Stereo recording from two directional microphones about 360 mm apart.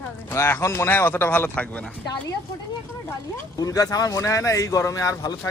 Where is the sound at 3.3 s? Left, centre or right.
Centre.